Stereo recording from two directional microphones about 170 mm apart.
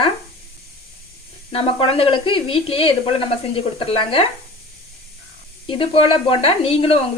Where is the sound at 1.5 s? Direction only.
35° left (ahead or behind).